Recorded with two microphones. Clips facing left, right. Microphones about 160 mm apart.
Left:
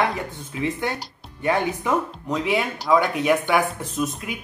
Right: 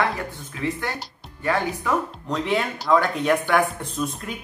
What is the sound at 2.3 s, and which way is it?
Speech, 5° left (ahead or behind).